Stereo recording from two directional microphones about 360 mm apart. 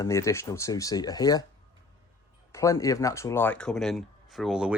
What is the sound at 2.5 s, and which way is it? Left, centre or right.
Speech, centre.